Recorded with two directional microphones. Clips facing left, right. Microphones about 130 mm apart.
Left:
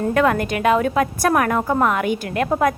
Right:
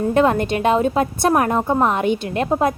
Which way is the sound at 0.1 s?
25° right (ahead or behind).